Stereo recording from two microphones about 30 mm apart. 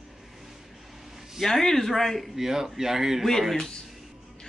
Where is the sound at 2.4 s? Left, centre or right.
Centre.